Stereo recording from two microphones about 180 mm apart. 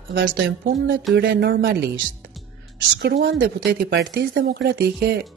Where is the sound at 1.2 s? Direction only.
60° right (ahead or behind).